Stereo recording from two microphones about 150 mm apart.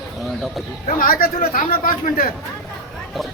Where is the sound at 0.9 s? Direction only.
70° left (ahead or behind).